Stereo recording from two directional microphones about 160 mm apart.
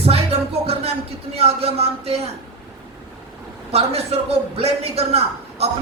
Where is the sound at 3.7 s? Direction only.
40° right (ahead or behind).